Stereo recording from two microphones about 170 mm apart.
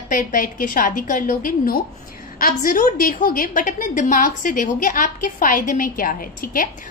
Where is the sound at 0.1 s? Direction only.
55° left (ahead or behind).